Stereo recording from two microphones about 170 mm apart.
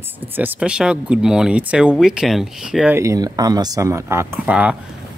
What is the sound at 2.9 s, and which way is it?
Speech, 20° right (ahead or behind).